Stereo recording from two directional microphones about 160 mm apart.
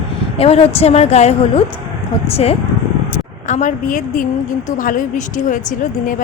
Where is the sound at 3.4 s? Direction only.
50° left (ahead or behind).